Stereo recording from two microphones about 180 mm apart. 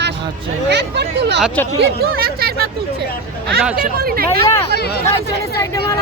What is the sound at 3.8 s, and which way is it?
Speech, 55° right (ahead or behind).